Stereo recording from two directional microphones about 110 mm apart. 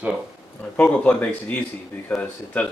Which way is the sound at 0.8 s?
15° left (ahead or behind).